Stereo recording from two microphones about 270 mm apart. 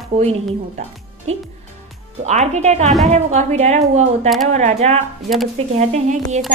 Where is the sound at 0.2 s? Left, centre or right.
Right.